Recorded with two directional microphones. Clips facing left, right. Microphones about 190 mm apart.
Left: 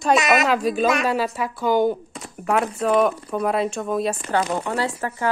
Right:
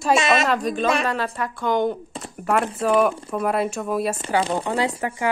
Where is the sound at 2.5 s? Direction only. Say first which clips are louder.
Even; centre (ahead or behind).